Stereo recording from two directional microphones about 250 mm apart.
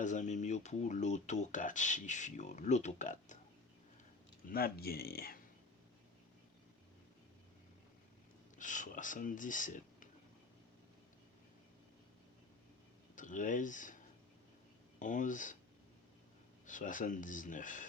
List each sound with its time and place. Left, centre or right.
0.0 s speech: left
4.4 s speech: left
8.5 s speech: left
13.1 s speech: left
16.6 s speech: left